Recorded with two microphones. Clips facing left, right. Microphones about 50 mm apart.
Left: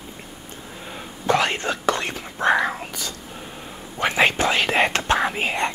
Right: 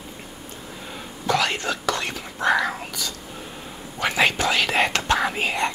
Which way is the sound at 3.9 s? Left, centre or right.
Left.